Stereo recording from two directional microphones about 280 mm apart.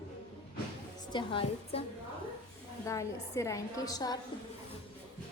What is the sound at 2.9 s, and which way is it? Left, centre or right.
A woman's voice, centre.